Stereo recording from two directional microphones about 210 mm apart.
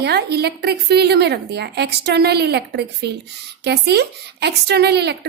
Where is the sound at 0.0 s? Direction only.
50° right (ahead or behind).